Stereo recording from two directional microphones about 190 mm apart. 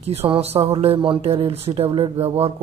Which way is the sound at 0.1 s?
30° right (ahead or behind).